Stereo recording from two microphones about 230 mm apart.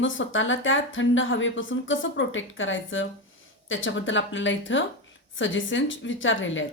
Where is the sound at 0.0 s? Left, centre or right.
Left.